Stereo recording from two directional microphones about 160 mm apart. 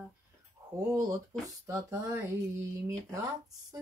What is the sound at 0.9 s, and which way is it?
Speech, 20° right (ahead or behind).